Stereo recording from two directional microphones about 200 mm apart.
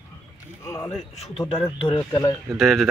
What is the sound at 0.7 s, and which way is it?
Speech, 15° left (ahead or behind).